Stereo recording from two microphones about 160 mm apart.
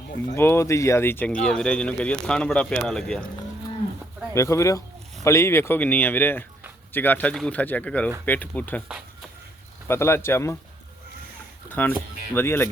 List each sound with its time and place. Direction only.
0.3 s speech: 15° left (ahead or behind)
4.4 s speech: 20° left (ahead or behind)
9.9 s speech: 15° left (ahead or behind)
11.7 s speech: 10° left (ahead or behind)